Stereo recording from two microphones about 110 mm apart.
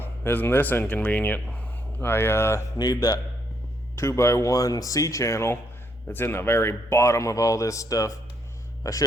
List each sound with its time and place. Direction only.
0.0 s speech: 20° left (ahead or behind)
2.7 s a man's voice: 35° left (ahead or behind)